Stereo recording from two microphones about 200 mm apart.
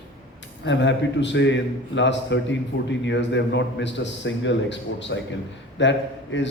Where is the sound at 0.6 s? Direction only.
65° left (ahead or behind).